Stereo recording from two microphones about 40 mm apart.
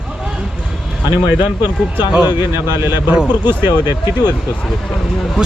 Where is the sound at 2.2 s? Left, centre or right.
Right.